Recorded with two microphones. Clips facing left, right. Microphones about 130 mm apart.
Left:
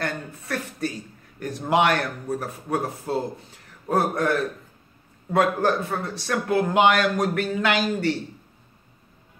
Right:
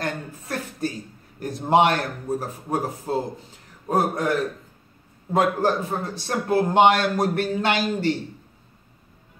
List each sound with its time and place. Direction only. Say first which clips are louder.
0.0 s a sound: even; 30° right (ahead or behind)
1.4 s a man's voice: right 3 dB; 30° right (ahead or behind)
3.9 s a man's voice: even; 15° right (ahead or behind)
5.6 s a man's voice: even; 20° right (ahead or behind)